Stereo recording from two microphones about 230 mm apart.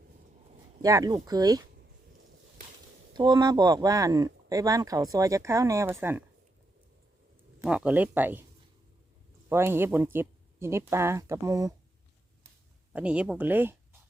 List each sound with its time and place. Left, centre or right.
0.8 s speech: centre
3.1 s speech: centre
7.6 s speech: centre
9.5 s speech: centre
12.9 s speech: centre